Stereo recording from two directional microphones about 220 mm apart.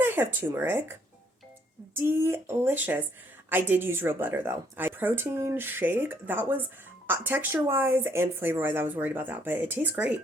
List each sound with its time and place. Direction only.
0.0 s speech: 10° right (ahead or behind)
2.0 s speech: 10° right (ahead or behind)